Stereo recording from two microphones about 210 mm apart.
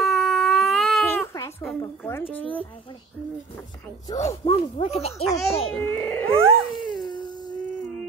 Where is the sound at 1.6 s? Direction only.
10° left (ahead or behind).